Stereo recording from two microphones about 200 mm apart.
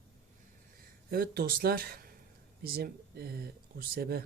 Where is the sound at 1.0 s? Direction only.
50° right (ahead or behind).